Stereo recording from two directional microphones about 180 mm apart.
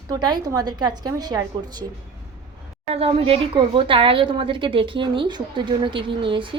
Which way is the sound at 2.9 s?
35° right (ahead or behind).